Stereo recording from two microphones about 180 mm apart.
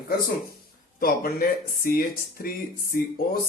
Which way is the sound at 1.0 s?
55° left (ahead or behind).